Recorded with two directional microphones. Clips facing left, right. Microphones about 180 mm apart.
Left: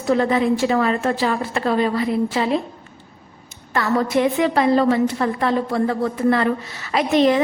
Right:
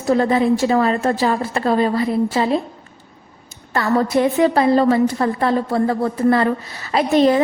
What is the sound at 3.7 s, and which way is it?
A woman's voice, 40° right (ahead or behind).